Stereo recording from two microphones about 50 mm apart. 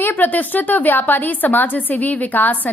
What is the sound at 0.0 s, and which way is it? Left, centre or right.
A woman's voice, left.